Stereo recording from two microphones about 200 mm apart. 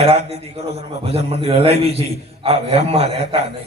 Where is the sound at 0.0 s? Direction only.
30° right (ahead or behind).